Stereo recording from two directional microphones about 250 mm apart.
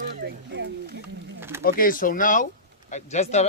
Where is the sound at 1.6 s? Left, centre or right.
Left.